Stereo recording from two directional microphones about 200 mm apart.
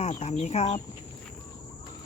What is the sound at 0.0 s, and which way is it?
Speech, 35° left (ahead or behind).